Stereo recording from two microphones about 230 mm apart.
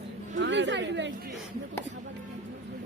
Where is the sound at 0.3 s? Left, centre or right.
Right.